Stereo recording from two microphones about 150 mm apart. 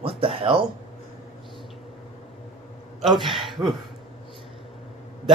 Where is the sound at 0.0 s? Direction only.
35° right (ahead or behind).